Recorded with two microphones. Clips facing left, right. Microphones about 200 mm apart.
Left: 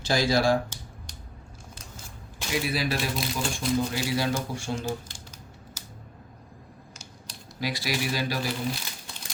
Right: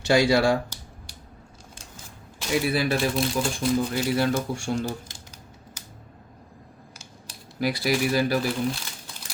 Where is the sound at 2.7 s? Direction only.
55° right (ahead or behind).